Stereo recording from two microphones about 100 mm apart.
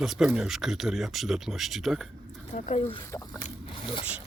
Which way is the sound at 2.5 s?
90° left.